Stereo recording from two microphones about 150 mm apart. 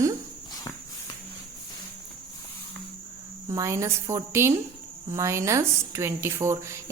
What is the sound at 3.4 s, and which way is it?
A woman's voice, 20° right (ahead or behind).